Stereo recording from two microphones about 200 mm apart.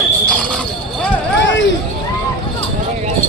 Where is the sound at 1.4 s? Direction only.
65° left (ahead or behind).